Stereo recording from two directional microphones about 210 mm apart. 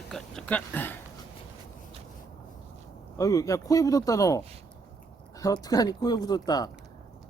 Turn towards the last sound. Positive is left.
turn(degrees=20)  # may be behind; listen again after turning